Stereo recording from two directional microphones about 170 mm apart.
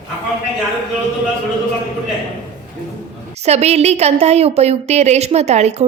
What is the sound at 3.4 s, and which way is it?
A woman's voice, 40° right (ahead or behind).